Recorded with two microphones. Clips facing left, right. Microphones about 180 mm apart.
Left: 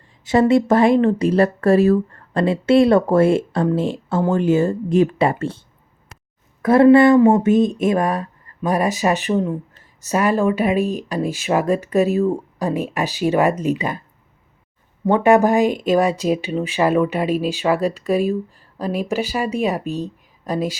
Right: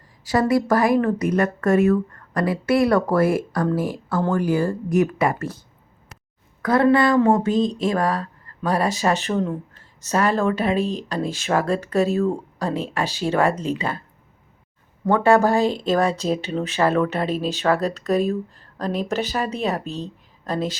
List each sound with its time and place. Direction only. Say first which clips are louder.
0.3 s speech: left 4 dB; 25° left (ahead or behind)
15.0 s speech: left 3 dB; 20° left (ahead or behind)